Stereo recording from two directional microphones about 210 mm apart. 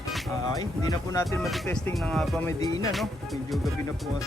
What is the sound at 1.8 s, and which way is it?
Speech, 10° left (ahead or behind).